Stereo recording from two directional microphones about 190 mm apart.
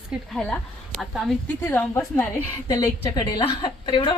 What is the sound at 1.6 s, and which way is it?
A woman's voice, 15° left (ahead or behind).